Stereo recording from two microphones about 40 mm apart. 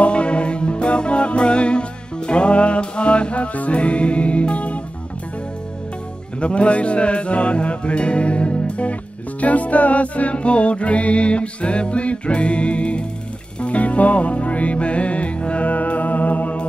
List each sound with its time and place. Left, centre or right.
0.0 s music: left
6.4 s music: left